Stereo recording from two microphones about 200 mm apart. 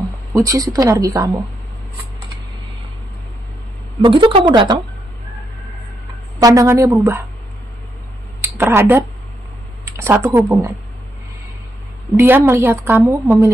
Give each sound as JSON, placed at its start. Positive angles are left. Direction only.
{"t": 0.3, "sound": "a woman's voice", "side_deg": -15}
{"t": 4.0, "sound": "a woman's voice", "side_deg": -25}
{"t": 6.4, "sound": "a woman's voice", "side_deg": -15}
{"t": 8.4, "sound": "a woman's voice", "side_deg": -10}
{"t": 12.2, "sound": "a woman's voice", "side_deg": -10}